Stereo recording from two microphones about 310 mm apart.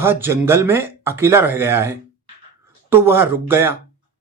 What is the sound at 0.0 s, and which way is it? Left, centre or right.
Speech, centre.